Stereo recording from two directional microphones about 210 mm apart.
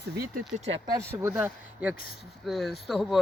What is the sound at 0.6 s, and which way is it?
Speech, 30° right (ahead or behind).